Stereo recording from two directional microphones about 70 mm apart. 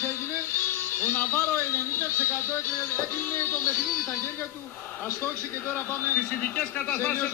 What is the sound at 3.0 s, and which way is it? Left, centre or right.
Music, left.